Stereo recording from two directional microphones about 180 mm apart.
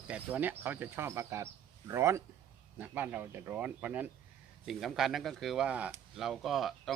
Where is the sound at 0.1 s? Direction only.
10° right (ahead or behind).